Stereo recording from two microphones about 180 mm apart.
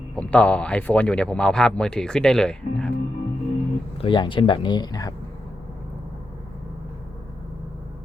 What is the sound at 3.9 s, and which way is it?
Speech, 25° left (ahead or behind).